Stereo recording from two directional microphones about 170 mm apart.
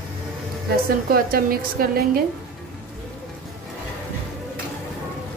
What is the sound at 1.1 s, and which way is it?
Speech, 60° right (ahead or behind).